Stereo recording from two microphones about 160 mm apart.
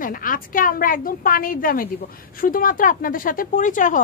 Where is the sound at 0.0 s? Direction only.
60° left (ahead or behind).